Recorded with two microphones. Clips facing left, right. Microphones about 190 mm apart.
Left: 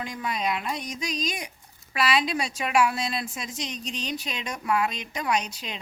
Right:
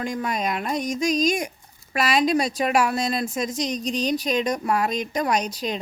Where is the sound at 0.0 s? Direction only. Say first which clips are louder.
Right 4 dB; 45° right (ahead or behind).